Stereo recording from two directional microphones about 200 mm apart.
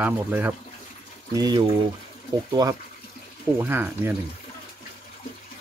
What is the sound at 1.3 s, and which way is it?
Speech, 20° right (ahead or behind).